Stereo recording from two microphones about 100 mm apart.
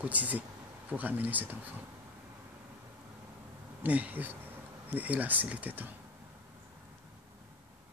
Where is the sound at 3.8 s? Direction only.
15° right (ahead or behind).